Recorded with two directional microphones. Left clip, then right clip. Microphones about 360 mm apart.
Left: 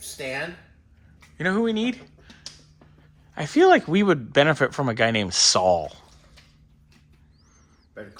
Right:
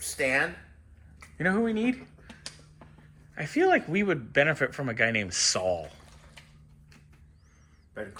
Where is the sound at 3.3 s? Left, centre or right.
Centre.